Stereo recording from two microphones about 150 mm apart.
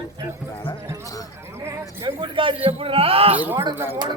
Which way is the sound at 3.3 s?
10° right (ahead or behind).